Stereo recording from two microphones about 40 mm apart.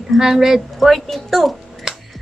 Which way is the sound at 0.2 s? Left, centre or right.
Centre.